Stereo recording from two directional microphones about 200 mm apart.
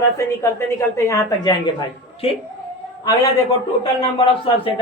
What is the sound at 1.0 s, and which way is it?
Speech, 15° left (ahead or behind).